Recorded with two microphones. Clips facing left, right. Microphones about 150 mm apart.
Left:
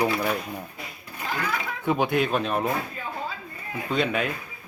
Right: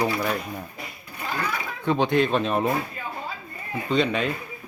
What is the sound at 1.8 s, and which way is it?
Speech, 10° left (ahead or behind).